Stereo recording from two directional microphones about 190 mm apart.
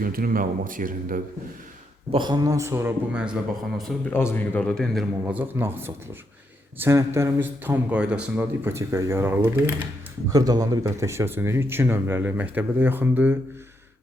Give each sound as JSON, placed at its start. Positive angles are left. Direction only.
{"t": 0.0, "sound": "speech", "side_deg": -50}
{"t": 2.1, "sound": "a man's voice", "side_deg": -20}
{"t": 5.2, "sound": "speech", "side_deg": -10}